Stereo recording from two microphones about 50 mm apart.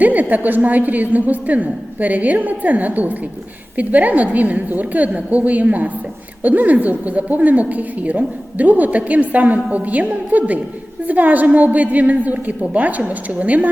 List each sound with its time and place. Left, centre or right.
0.0 s a woman's voice: right